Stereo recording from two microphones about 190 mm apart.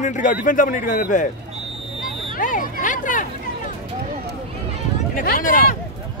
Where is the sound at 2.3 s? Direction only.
45° left (ahead or behind).